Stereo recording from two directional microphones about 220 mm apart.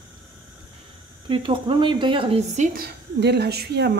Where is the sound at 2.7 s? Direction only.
45° right (ahead or behind).